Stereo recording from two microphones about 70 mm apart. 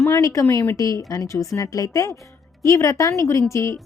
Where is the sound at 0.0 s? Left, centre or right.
Left.